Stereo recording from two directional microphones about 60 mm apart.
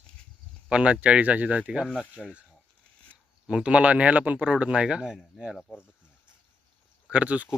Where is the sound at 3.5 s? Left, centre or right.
Centre.